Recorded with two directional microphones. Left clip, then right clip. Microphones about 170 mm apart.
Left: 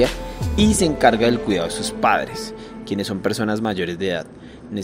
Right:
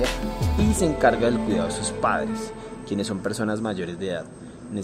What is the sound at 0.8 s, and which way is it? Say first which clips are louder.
Speech: left 3 dB; 10° left (ahead or behind).